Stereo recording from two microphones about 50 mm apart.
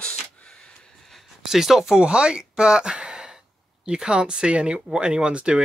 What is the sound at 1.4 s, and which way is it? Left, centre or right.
Speech, centre.